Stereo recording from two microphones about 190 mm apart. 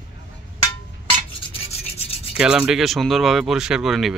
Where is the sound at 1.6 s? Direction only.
35° left (ahead or behind).